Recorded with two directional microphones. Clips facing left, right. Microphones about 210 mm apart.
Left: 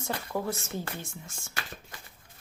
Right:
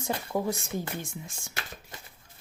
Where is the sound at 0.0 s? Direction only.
15° right (ahead or behind).